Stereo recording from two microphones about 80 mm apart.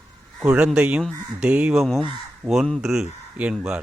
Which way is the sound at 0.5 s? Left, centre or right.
Centre.